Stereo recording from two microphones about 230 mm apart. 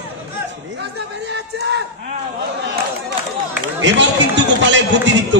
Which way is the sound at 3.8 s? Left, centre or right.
Right.